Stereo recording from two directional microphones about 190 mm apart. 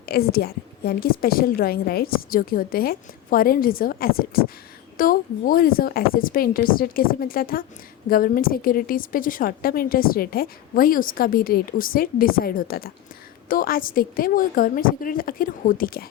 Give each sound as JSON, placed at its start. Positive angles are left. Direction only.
{"t": 0.0, "sound": "a woman's voice", "side_deg": 55}